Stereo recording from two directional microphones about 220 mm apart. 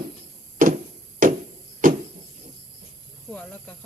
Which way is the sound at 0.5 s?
35° right (ahead or behind).